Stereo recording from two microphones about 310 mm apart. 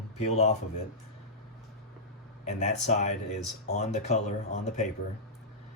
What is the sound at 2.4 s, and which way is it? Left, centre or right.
Speech, left.